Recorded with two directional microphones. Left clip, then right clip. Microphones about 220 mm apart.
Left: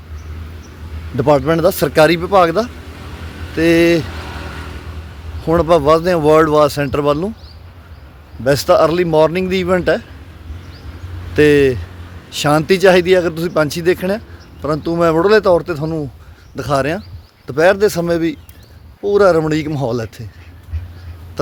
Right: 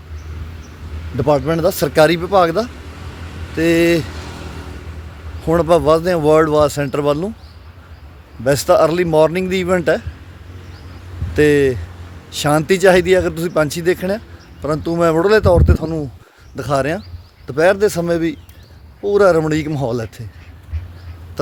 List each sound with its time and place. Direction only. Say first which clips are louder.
1.1 s speech: left 3 dB; 15° left (ahead or behind)
4.1 s vehicle: left 3 dB; 30° left (ahead or behind)
5.5 s speech: left 1 dB; centre (ahead or behind)
8.4 s speech: left 1 dB; centre (ahead or behind)
11.3 s speech: left 2 dB; centre (ahead or behind)
21.4 s speech: left 2 dB; 5° left (ahead or behind)